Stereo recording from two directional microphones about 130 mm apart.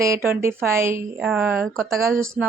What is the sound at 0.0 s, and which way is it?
Speech, 20° right (ahead or behind).